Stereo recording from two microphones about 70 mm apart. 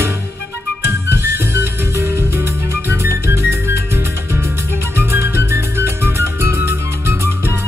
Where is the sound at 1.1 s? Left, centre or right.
Right.